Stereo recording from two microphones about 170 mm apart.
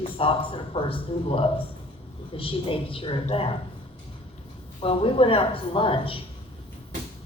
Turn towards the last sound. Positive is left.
turn(degrees=30)  # may be behind; listen again after turning